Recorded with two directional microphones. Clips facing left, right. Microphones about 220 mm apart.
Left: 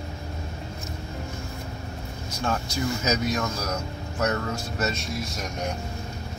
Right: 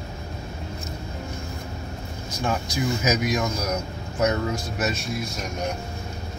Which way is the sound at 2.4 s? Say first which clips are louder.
Right 2 dB; 10° right (ahead or behind).